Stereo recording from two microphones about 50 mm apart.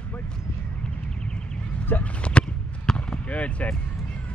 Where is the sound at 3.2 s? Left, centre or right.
Left.